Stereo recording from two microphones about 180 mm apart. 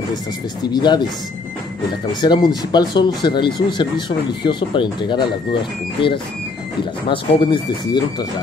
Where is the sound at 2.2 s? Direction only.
25° left (ahead or behind).